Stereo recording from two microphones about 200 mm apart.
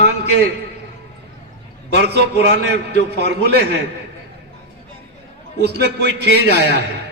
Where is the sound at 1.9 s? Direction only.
55° right (ahead or behind).